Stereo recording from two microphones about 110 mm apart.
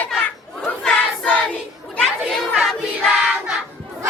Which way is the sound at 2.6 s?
5° right (ahead or behind).